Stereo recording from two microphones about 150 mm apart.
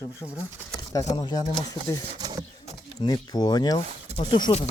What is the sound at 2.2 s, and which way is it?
Speech, 25° right (ahead or behind).